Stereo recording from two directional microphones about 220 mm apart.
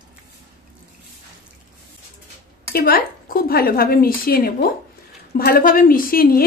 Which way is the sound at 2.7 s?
40° left (ahead or behind).